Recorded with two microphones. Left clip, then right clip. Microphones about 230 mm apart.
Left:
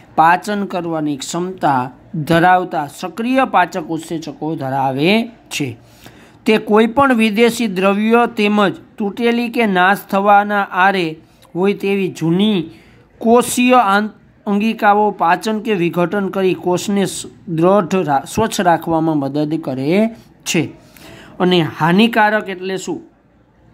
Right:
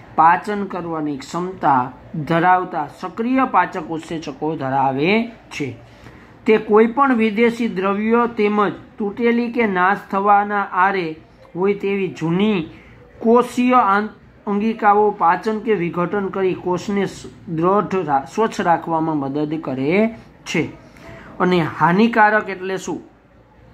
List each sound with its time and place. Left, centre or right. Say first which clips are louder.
0.1 s speech: left 2 dB; left
13.2 s speech: left 3 dB; left